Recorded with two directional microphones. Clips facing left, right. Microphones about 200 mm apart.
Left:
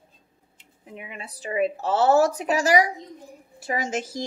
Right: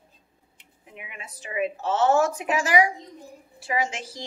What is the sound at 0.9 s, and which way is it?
A woman's voice, 35° left (ahead or behind).